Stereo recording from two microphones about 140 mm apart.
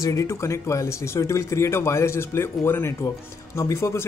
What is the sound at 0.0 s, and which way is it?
Speech, 20° left (ahead or behind).